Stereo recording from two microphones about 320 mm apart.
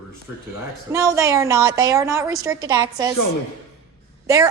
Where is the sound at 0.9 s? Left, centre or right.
Centre.